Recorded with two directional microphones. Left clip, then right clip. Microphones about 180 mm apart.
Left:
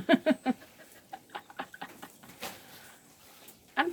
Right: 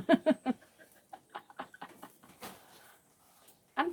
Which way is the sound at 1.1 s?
Centre (ahead or behind).